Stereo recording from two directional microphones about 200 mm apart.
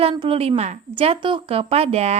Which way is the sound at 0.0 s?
30° right (ahead or behind).